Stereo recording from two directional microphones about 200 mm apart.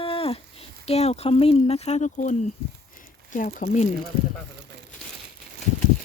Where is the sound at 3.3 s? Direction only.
40° left (ahead or behind).